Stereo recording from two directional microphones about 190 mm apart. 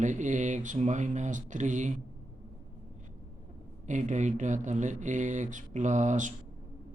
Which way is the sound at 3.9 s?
40° right (ahead or behind).